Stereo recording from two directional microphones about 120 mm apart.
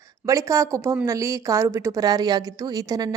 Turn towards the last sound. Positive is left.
turn(degrees=-30)  # may be behind; listen again after turning